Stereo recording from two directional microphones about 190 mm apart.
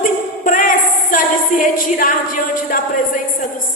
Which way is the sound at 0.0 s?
45° left (ahead or behind).